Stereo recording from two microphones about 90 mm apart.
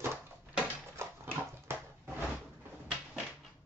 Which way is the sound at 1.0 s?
30° right (ahead or behind).